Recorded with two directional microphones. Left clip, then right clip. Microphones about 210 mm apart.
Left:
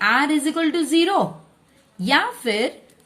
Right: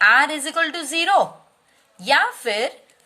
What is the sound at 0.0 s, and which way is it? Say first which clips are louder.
A woman's voice: right 3 dB; 30° right (ahead or behind).